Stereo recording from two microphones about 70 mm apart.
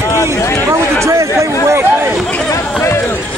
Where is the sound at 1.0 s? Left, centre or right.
Right.